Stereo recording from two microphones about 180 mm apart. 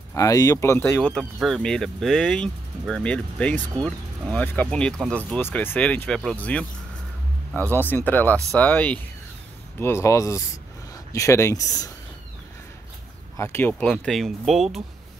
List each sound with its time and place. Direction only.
0.1 s speech: 15° left (ahead or behind)
7.7 s speech: 10° left (ahead or behind)
13.4 s speech: 15° left (ahead or behind)